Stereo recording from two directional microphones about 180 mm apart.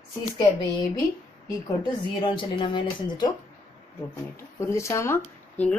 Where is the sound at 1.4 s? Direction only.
25° left (ahead or behind).